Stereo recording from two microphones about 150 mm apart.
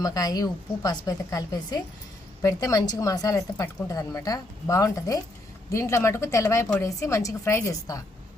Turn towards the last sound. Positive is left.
turn(degrees=20)  # may be behind; listen again after turning